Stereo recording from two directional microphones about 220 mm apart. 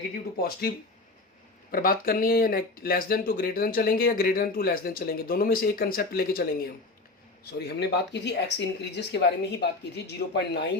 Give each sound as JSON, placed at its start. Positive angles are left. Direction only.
{"t": 0.1, "sound": "speech", "side_deg": 45}
{"t": 1.7, "sound": "speech", "side_deg": 40}
{"t": 7.6, "sound": "speech", "side_deg": 50}